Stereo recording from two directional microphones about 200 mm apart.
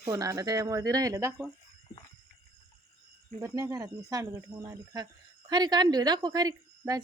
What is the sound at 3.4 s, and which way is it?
Speech, 15° right (ahead or behind).